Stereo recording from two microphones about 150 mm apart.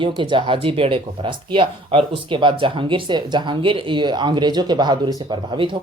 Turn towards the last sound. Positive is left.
turn(degrees=-35)  # may be behind; listen again after turning